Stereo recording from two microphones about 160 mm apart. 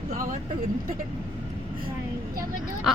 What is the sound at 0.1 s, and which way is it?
Vehicle, 55° right (ahead or behind).